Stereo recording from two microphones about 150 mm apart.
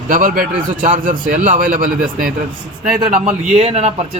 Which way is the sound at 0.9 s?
55° right (ahead or behind).